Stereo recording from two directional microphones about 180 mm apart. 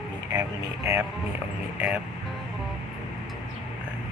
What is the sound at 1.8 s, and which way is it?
Speech, 5° right (ahead or behind).